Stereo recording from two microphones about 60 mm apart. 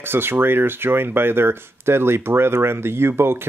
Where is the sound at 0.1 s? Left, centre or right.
Right.